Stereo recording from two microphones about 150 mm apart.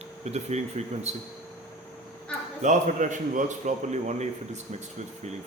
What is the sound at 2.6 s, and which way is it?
A man's voice, 55° right (ahead or behind).